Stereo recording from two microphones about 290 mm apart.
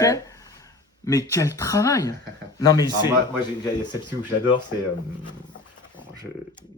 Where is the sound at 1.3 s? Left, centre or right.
Centre.